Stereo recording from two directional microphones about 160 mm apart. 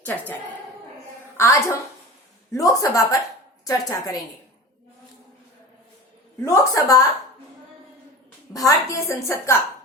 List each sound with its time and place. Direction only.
0.0 s speech: 10° left (ahead or behind)
1.4 s a woman's voice: 20° left (ahead or behind)
6.4 s a woman's voice: 20° left (ahead or behind)
8.5 s a woman's voice: 20° left (ahead or behind)